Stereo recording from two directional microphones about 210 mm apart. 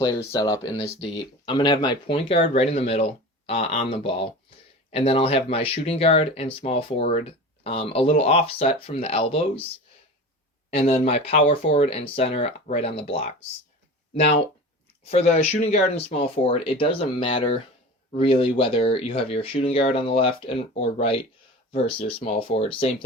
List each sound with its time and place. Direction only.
0.2 s speech: 20° left (ahead or behind)
10.8 s speech: 30° left (ahead or behind)
15.1 s speech: 30° left (ahead or behind)